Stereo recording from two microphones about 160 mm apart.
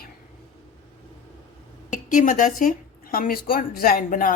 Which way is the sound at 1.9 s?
55° left (ahead or behind).